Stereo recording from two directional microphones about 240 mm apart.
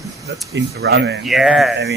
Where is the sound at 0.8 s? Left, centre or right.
Right.